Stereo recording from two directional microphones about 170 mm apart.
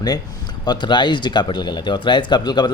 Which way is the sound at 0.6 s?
25° left (ahead or behind).